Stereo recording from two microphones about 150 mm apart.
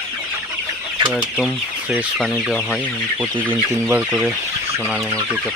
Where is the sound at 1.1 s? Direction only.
5° right (ahead or behind).